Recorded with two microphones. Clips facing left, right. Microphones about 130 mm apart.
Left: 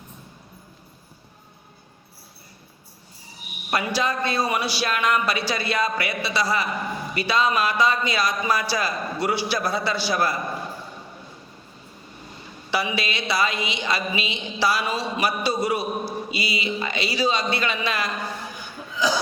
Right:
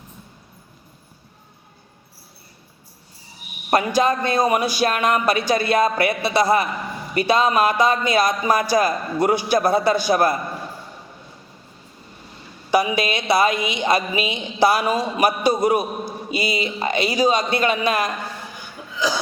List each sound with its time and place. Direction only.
3.7 s speech: 45° right (ahead or behind)
12.7 s speech: 50° right (ahead or behind)